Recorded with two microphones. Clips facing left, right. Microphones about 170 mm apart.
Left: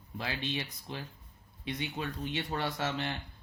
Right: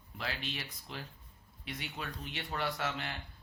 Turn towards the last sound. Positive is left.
turn(degrees=25)  # may be behind; listen again after turning